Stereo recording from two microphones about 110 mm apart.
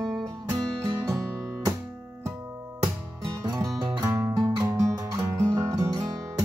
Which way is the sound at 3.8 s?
45° right (ahead or behind).